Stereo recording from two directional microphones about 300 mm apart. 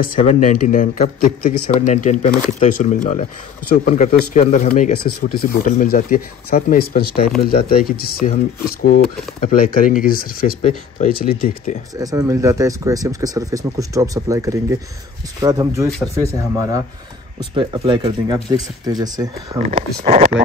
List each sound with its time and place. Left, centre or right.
0.0 s speech: left
11.9 s speech: centre